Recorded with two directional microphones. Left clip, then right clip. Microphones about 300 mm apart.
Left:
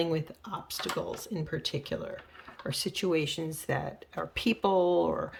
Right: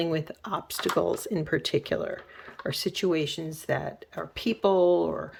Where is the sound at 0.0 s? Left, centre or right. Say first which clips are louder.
Right 2 dB; centre.